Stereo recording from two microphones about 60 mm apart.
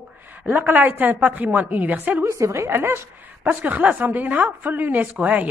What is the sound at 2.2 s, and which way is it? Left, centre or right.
A woman's voice, right.